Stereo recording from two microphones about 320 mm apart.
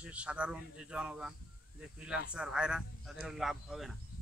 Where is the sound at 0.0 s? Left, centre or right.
Centre.